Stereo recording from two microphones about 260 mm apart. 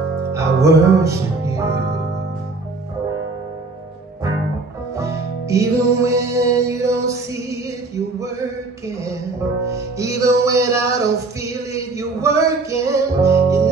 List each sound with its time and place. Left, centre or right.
0.3 s music: centre
1.7 s music: right
4.9 s music: centre
9.7 s music: centre